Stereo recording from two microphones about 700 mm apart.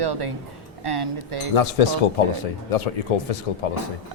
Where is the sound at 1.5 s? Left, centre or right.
Left.